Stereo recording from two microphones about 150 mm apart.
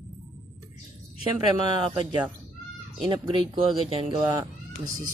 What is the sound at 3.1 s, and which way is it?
Speech, 35° right (ahead or behind).